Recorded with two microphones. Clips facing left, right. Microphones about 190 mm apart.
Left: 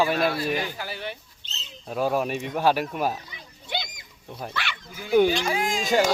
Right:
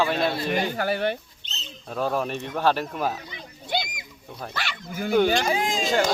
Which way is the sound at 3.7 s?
40° right (ahead or behind).